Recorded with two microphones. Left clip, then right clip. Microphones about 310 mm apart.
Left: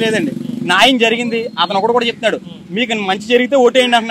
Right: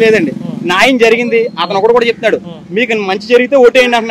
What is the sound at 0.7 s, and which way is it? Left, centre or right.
A man's voice, left.